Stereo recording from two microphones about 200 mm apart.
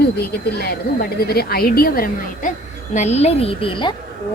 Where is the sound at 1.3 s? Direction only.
50° left (ahead or behind).